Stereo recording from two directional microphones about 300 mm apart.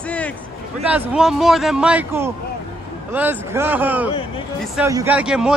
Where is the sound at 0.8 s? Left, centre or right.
Centre.